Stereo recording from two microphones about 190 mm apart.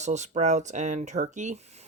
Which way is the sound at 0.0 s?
35° right (ahead or behind).